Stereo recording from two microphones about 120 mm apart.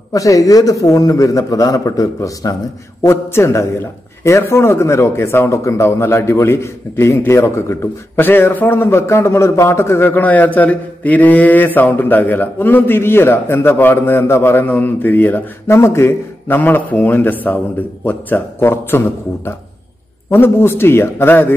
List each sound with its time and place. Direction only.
0.1 s a man's voice: 30° left (ahead or behind)